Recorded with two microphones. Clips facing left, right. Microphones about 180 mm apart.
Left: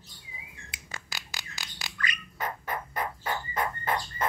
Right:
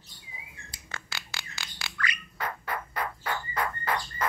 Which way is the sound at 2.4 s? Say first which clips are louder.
Even; 20° left (ahead or behind).